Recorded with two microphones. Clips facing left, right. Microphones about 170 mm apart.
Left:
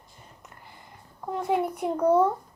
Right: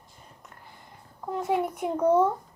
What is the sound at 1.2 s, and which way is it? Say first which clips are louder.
Speech: left 1 dB; centre (ahead or behind).